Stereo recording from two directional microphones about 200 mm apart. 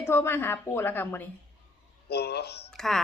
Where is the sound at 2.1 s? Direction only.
55° left (ahead or behind).